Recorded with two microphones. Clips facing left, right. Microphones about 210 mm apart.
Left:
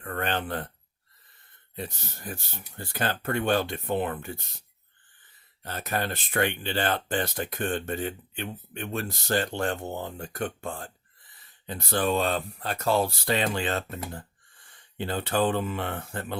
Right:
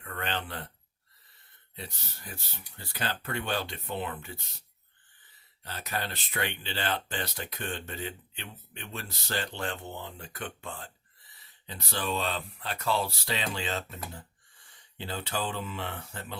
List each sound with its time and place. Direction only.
0.0 s speech: 50° left (ahead or behind)
1.7 s speech: 50° left (ahead or behind)
5.6 s speech: 50° left (ahead or behind)